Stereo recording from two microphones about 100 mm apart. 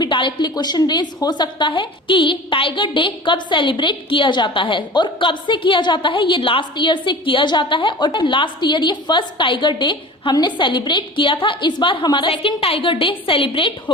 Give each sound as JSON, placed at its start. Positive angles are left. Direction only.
{"t": 0.0, "sound": "a woman's voice", "side_deg": 50}